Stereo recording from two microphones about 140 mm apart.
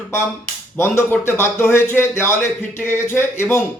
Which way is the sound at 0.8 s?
15° left (ahead or behind).